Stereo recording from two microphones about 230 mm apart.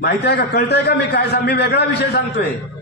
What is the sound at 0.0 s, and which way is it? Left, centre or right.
A man's voice, left.